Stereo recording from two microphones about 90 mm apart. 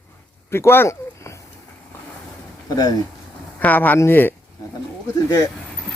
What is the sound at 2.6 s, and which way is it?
Speech, 45° left (ahead or behind).